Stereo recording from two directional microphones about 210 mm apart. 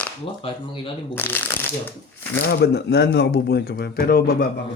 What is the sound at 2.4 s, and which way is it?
Speech, 50° left (ahead or behind).